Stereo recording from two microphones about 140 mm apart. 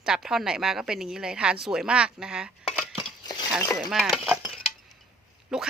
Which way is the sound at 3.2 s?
30° left (ahead or behind).